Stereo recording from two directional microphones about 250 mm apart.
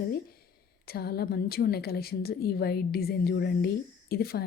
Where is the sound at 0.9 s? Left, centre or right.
Left.